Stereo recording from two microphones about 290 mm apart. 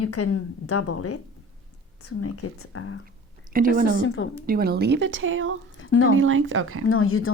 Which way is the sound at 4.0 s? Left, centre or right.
Left.